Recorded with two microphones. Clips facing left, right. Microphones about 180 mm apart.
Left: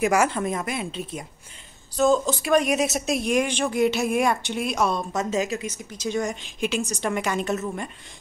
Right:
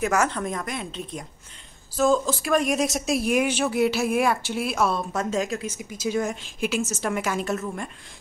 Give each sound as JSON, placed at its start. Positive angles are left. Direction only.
{"t": 0.0, "sound": "speech", "side_deg": 10}
{"t": 5.7, "sound": "speech", "side_deg": -10}